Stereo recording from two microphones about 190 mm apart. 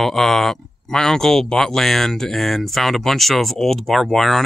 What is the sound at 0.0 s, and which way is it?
Speech, centre (ahead or behind).